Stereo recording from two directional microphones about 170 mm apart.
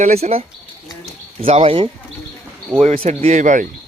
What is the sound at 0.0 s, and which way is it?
Speech, 40° right (ahead or behind).